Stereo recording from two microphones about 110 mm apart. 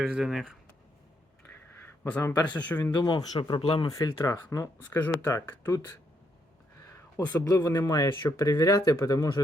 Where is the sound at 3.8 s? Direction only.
30° left (ahead or behind).